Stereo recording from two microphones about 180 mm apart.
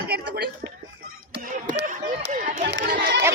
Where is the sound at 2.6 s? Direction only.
65° right (ahead or behind).